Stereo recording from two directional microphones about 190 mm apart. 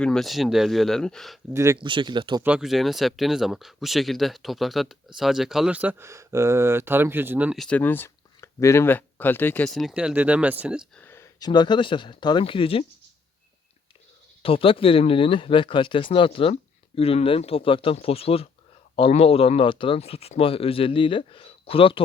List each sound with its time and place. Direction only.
0.0 s speech: centre (ahead or behind)
1.5 s speech: 15° right (ahead or behind)
2.4 s speech: 5° right (ahead or behind)
11.0 s speech: 15° left (ahead or behind)
14.4 s speech: 30° left (ahead or behind)